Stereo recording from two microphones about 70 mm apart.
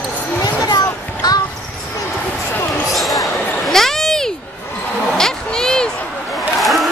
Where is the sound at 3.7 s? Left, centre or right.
Centre.